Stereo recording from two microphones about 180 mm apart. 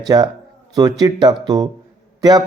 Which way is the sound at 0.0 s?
20° right (ahead or behind).